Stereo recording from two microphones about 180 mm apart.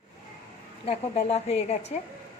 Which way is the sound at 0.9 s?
35° left (ahead or behind).